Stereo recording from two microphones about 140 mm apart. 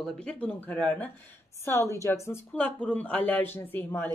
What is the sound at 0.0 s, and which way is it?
Speech, 5° left (ahead or behind).